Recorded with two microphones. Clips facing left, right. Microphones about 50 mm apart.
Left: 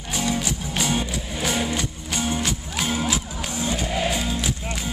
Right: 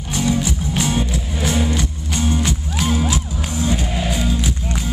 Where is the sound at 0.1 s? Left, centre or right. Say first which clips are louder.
Right 5 dB; centre.